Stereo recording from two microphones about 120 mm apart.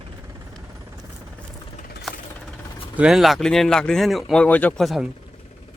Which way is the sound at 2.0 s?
5° left (ahead or behind).